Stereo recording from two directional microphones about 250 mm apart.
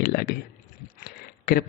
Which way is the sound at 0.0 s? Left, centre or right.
Left.